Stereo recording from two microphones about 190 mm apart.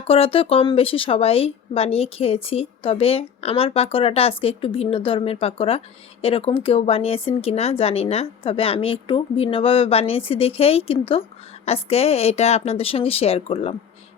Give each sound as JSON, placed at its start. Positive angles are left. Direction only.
{"t": 0.1, "sound": "speech", "side_deg": 30}